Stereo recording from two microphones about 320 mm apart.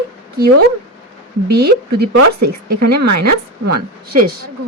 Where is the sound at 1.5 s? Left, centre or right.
Right.